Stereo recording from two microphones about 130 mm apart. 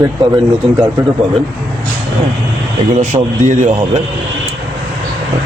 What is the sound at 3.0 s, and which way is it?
Speech, 65° right (ahead or behind).